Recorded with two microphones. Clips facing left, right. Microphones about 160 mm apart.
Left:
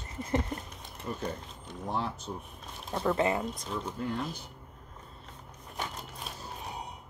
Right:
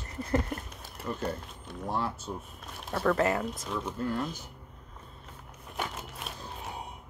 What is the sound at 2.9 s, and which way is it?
Speech, 20° left (ahead or behind).